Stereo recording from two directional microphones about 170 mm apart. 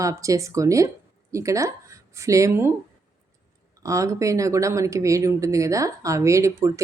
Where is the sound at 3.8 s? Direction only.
20° right (ahead or behind).